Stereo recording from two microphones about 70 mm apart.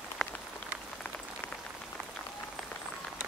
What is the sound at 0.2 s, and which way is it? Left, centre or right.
Rain on surface, centre.